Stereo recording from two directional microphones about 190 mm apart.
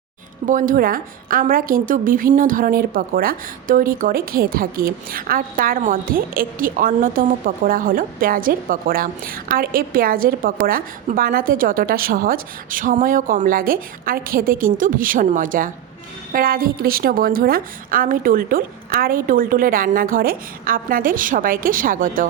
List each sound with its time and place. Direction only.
0.4 s a woman's voice: 45° right (ahead or behind)